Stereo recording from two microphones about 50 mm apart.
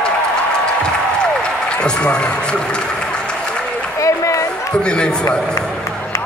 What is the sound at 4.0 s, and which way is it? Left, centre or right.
Run, left.